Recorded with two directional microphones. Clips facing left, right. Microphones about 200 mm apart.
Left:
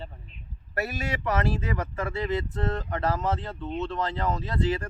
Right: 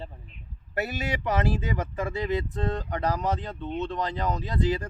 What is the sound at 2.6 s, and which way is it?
Speech, 15° right (ahead or behind).